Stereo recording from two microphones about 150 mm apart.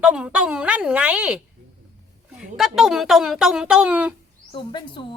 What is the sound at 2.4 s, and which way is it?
A woman's voice, centre (ahead or behind).